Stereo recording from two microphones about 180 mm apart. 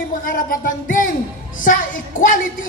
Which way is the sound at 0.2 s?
50° left (ahead or behind).